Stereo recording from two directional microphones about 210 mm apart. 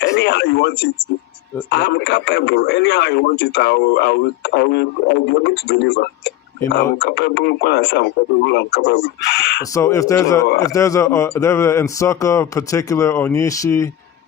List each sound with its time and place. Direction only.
0.0 s a man's voice: 55° left (ahead or behind)
9.7 s speech: 15° left (ahead or behind)